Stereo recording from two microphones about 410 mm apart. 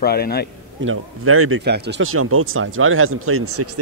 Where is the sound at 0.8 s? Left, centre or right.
Right.